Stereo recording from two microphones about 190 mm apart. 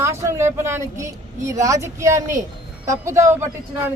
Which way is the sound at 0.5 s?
15° right (ahead or behind).